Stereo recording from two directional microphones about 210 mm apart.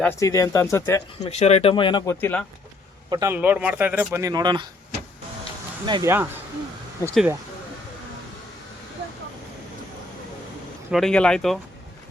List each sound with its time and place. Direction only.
0.0 s speech: 10° left (ahead or behind)
1.2 s speech: 30° left (ahead or behind)
3.1 s speech: 15° right (ahead or behind)
5.8 s speech: 20° right (ahead or behind)
7.0 s speech: 5° left (ahead or behind)
10.9 s speech: 5° left (ahead or behind)